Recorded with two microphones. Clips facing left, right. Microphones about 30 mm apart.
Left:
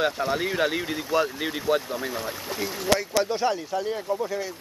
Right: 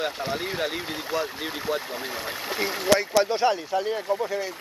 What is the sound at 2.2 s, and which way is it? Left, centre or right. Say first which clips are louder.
Speech: right 2 dB; right.